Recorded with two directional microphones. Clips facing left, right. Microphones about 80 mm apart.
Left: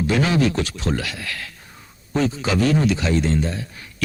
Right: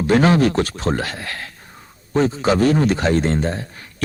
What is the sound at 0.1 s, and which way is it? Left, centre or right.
A man's voice, right.